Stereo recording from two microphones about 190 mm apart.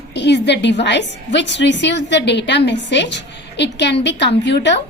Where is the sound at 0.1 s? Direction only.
65° left (ahead or behind).